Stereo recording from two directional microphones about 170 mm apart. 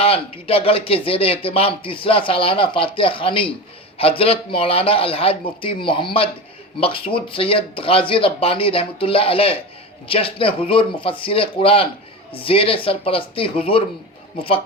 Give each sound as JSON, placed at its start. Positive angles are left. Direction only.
{"t": 0.0, "sound": "speech", "side_deg": 35}